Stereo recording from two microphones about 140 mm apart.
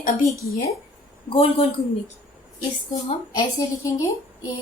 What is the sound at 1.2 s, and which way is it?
Speech, 40° left (ahead or behind).